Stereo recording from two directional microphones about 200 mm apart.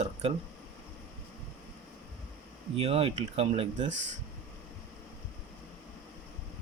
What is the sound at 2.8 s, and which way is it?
Speech, 30° right (ahead or behind).